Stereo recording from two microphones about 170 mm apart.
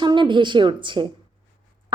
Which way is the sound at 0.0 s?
30° right (ahead or behind).